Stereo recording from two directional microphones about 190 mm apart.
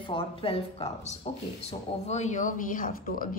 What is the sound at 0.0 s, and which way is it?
Speech, 30° left (ahead or behind).